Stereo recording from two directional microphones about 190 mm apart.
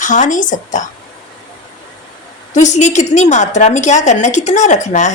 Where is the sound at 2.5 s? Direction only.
40° left (ahead or behind).